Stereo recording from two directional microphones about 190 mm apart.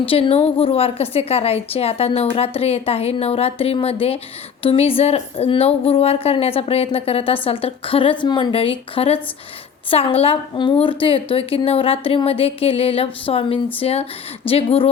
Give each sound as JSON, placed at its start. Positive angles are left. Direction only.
{"t": 0.1, "sound": "a woman's voice", "side_deg": 30}